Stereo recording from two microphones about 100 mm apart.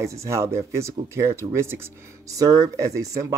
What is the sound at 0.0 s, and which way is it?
Speech, 30° right (ahead or behind).